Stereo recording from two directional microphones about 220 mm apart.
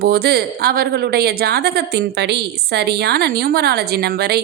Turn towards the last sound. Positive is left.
turn(degrees=-45)  # may be behind; listen again after turning